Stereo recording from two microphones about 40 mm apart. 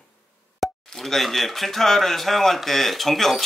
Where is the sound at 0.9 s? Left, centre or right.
Centre.